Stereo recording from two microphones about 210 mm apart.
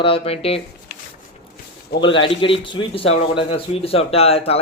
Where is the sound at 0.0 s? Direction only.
25° left (ahead or behind).